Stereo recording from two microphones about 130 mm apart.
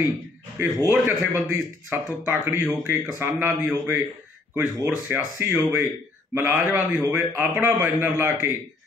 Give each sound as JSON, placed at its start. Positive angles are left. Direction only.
{"t": 0.6, "sound": "speech", "side_deg": -15}
{"t": 5.0, "sound": "speech", "side_deg": -15}